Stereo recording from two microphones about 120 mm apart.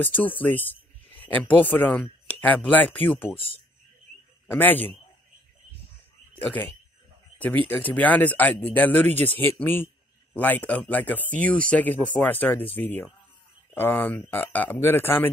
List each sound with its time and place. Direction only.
0.0 s speech: 15° left (ahead or behind)
4.5 s speech: 15° left (ahead or behind)
6.3 s a man's voice: 15° left (ahead or behind)